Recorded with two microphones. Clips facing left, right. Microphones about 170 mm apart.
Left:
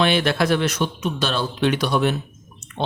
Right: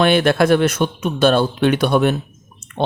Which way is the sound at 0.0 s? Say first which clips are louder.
Right 5 dB; 50° right (ahead or behind).